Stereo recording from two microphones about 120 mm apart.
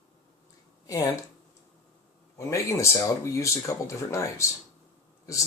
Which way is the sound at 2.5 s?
25° left (ahead or behind).